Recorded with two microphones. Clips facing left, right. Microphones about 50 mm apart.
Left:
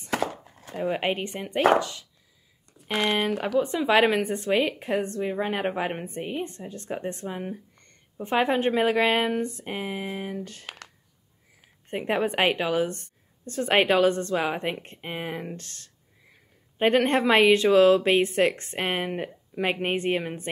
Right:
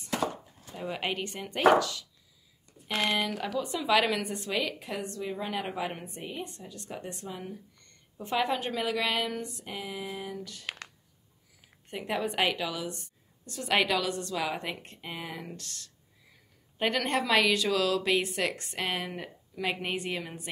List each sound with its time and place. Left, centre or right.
0.1 s chopping: left
0.7 s a woman's voice: left
2.9 s speech: left
11.9 s speech: left